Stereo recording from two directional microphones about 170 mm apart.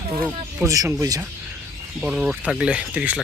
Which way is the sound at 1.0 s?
20° right (ahead or behind).